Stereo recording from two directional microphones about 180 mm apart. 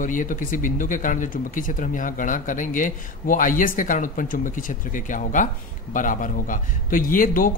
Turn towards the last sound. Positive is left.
turn(degrees=50)  # may be behind; listen again after turning